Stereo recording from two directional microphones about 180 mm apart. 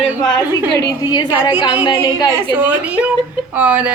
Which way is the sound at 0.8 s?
20° left (ahead or behind).